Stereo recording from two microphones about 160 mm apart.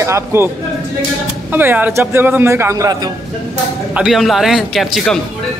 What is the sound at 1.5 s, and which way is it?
Speech, 10° right (ahead or behind).